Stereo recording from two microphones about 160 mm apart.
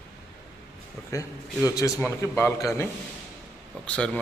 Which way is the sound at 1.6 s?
20° left (ahead or behind).